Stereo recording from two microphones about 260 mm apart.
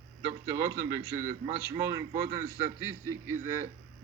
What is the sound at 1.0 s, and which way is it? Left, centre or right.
A man's voice, centre.